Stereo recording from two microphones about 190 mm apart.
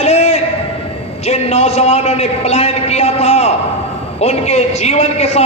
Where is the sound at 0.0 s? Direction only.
35° left (ahead or behind).